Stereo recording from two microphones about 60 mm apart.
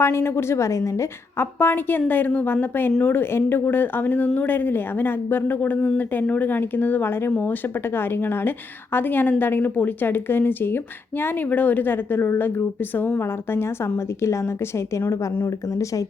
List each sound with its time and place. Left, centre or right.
0.0 s a woman's voice: left